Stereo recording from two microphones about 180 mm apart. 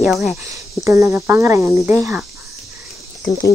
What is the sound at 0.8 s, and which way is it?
Speech, 15° right (ahead or behind).